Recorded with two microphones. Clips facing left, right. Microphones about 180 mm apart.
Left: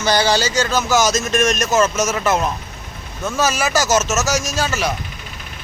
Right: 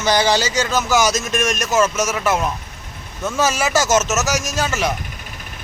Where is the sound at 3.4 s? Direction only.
20° right (ahead or behind).